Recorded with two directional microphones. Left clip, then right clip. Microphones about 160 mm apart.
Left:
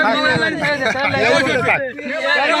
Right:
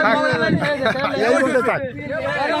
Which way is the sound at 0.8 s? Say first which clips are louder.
Left 3 dB; 90° right.